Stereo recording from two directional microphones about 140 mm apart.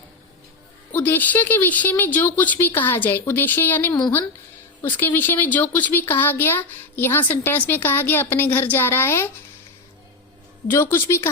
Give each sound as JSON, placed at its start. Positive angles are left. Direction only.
{"t": 0.9, "sound": "speech", "side_deg": 15}
{"t": 10.7, "sound": "speech", "side_deg": 20}